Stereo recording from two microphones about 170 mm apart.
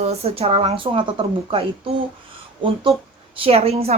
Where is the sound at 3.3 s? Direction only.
35° right (ahead or behind).